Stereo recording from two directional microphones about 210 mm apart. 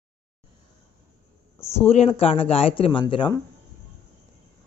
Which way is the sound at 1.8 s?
30° left (ahead or behind).